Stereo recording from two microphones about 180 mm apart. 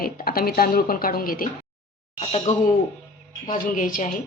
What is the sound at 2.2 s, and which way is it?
Speech, 35° left (ahead or behind).